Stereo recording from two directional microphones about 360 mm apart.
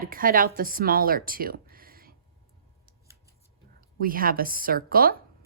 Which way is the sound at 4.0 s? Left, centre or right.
Right.